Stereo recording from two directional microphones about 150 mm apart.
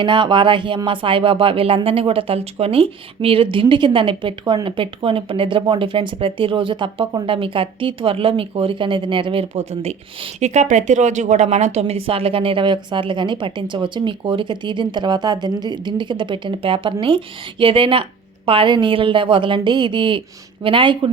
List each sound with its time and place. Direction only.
0.0 s speech: 30° right (ahead or behind)